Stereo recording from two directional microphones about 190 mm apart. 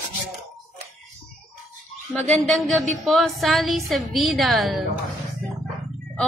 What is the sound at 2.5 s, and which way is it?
A woman's voice, centre (ahead or behind).